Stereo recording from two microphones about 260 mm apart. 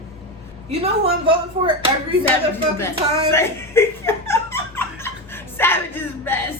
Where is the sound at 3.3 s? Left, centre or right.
Centre.